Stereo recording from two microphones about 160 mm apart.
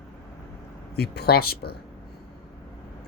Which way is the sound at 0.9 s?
85° left.